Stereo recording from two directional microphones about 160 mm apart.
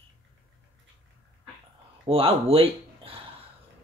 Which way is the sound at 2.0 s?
35° right (ahead or behind).